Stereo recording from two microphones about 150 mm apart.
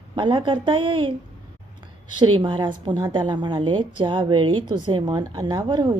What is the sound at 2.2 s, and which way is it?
A woman's voice, 30° right (ahead or behind).